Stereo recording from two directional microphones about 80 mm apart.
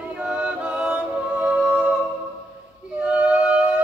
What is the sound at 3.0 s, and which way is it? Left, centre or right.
Music, centre.